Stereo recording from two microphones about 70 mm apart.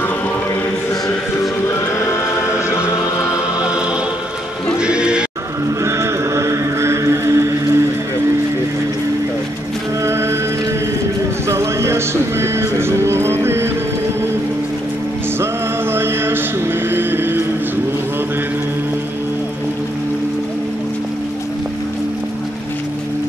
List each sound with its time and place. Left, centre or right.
2.4 s music: left
3.0 s music: left
4.7 s music: centre
5.9 s a sound: right
10.0 s music: right
11.4 s music: right
15.9 s music: right
16.9 s vehicle: right